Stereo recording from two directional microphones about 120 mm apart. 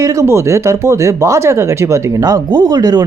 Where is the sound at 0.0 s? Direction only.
25° right (ahead or behind).